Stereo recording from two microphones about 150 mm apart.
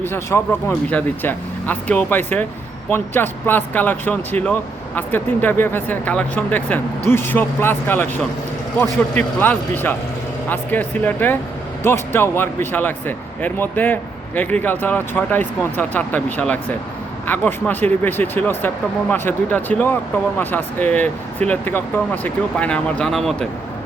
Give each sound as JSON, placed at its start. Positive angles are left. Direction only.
{"t": 0.0, "sound": "speech", "side_deg": 15}